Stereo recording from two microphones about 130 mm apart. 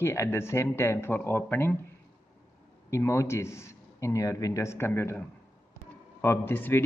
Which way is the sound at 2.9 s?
25° left (ahead or behind).